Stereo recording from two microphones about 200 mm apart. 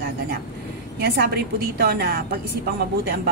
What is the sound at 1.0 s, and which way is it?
A woman's voice, 50° right (ahead or behind).